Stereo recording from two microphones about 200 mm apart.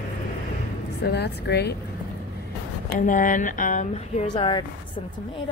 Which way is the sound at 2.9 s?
40° left (ahead or behind).